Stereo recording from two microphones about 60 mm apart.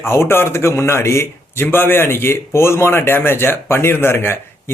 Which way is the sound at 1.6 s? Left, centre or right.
Left.